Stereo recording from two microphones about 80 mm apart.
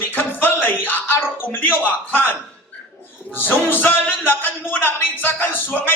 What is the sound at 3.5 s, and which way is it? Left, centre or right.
A man's voice, left.